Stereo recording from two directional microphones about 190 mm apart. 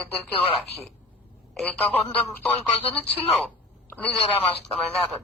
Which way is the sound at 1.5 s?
5° left (ahead or behind).